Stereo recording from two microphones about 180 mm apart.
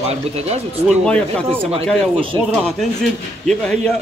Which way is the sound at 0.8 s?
5° left (ahead or behind).